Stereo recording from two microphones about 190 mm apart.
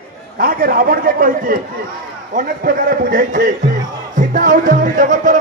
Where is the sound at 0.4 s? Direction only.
50° right (ahead or behind).